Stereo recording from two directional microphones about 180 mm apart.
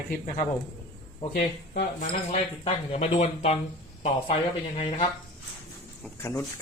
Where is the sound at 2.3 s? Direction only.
35° left (ahead or behind).